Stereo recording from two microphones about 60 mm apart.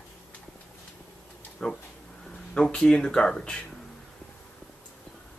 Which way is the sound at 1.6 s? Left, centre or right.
Centre.